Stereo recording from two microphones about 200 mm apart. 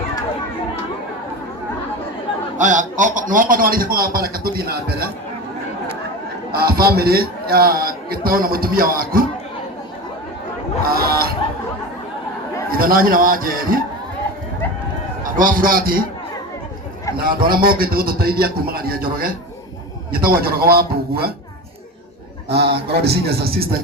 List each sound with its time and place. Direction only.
2.6 s a man's voice: 40° right (ahead or behind)
6.5 s a man's voice: 50° right (ahead or behind)
10.8 s a sound: 50° right (ahead or behind)
12.6 s a man's voice: 45° right (ahead or behind)
15.4 s a man's voice: 45° right (ahead or behind)
17.5 s a man's voice: 45° right (ahead or behind)
20.1 s a man's voice: 50° right (ahead or behind)
22.4 s a man's voice: 55° right (ahead or behind)